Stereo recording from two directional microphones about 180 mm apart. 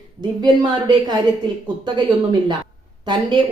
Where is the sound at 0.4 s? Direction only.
25° right (ahead or behind).